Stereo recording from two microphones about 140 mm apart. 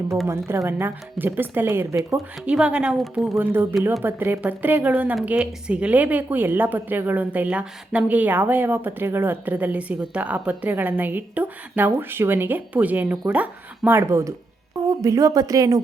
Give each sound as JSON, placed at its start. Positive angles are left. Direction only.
{"t": 0.3, "sound": "a woman's voice", "side_deg": -20}
{"t": 3.3, "sound": "a woman's voice", "side_deg": -15}